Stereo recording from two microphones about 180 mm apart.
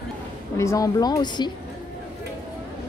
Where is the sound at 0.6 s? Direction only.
20° left (ahead or behind).